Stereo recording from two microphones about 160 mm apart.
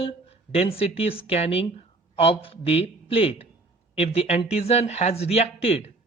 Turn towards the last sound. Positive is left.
turn(degrees=40)  # may be behind; listen again after turning